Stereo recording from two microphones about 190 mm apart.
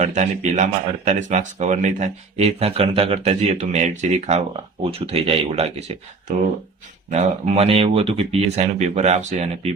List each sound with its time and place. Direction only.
0.0 s speech: 40° right (ahead or behind)